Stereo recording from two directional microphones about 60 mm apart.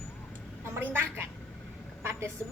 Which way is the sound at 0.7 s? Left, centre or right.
Right.